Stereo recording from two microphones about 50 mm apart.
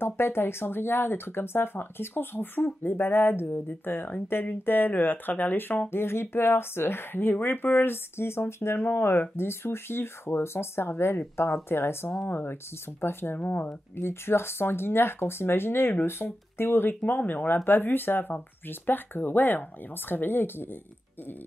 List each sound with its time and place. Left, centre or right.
0.0 s speech: left
13.9 s speech: left